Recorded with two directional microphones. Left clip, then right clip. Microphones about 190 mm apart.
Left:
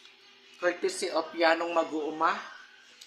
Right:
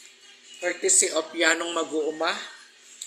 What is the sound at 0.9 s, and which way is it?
Speech, 20° left (ahead or behind).